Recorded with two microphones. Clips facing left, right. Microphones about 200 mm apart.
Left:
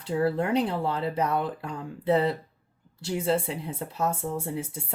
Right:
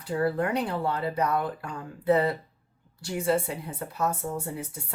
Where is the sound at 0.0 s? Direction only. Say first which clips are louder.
Left 1 dB; 25° left (ahead or behind).